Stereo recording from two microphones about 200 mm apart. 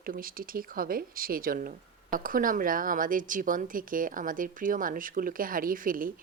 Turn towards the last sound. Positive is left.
turn(degrees=-45)  # may be behind; listen again after turning